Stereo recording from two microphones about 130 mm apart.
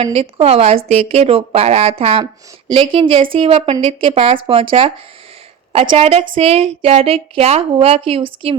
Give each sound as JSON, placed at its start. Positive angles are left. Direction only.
{"t": 0.0, "sound": "a woman's voice", "side_deg": -45}
{"t": 6.0, "sound": "speech", "side_deg": -50}